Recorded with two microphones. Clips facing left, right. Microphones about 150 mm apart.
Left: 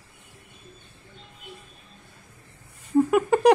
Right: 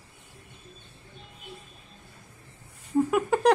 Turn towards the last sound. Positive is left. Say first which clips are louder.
# left 4 dB
turn(degrees=5)  # may be behind; listen again after turning